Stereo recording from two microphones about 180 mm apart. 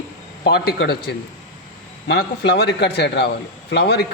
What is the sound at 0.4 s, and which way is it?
A man's voice, 65° left (ahead or behind).